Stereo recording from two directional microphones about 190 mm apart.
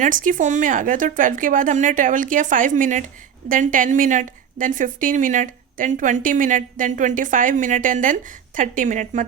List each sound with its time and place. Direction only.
0.0 s a woman's voice: 45° right (ahead or behind)